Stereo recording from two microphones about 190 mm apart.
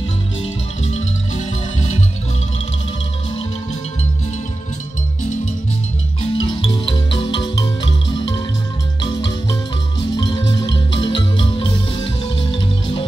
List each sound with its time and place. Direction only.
0.4 s marimba: 35° left (ahead or behind)
6.3 s music: 25° left (ahead or behind)
11.0 s music: 25° left (ahead or behind)